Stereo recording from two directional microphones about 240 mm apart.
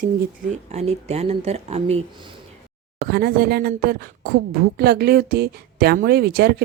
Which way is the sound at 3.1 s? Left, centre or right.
Right.